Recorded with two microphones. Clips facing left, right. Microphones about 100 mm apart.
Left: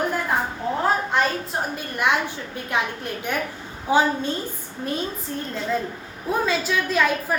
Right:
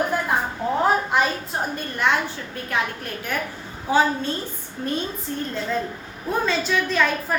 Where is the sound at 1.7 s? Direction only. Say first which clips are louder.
Even; 10° left (ahead or behind).